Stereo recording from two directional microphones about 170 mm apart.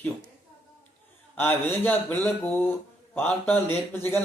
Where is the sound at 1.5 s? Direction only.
10° left (ahead or behind).